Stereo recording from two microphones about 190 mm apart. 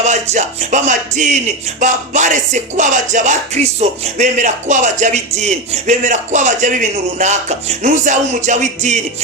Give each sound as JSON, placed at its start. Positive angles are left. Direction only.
{"t": 0.0, "sound": "music", "side_deg": -40}